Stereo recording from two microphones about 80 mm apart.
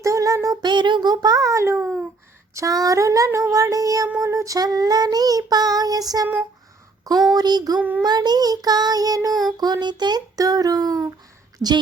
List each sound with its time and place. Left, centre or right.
0.0 s a sound: right
0.6 s child singing: right
2.6 s child singing: right
7.3 s child singing: right
7.8 s child singing: right
8.0 s child singing: right